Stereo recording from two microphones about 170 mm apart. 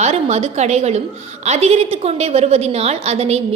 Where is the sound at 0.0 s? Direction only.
40° right (ahead or behind).